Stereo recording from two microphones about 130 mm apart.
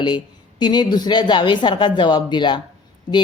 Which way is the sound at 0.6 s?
35° left (ahead or behind).